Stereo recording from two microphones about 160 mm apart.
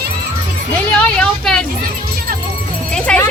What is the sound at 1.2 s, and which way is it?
Speech, 5° left (ahead or behind).